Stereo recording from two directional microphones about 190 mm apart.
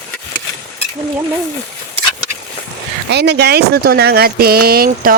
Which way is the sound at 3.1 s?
60° right (ahead or behind).